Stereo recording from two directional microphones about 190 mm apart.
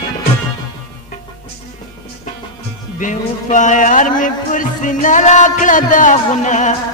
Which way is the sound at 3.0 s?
40° left (ahead or behind).